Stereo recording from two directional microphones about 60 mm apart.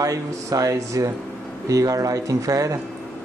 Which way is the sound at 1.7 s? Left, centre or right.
Right.